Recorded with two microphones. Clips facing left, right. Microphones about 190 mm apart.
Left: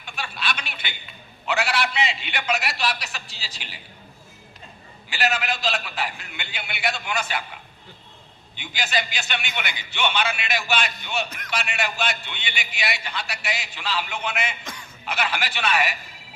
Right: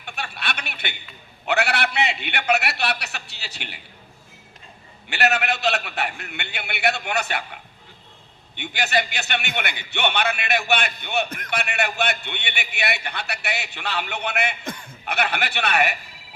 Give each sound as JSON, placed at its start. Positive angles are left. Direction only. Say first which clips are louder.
{"t": 0.0, "sound": "a sound", "louder": "left 1 dB", "side_deg": -60}
{"t": 1.5, "sound": "a man's voice", "louder": "right 2 dB", "side_deg": -60}
{"t": 5.0, "sound": "a man's voice", "louder": "right 3 dB", "side_deg": -65}
{"t": 8.5, "sound": "a man's voice", "louder": "right 4 dB", "side_deg": -60}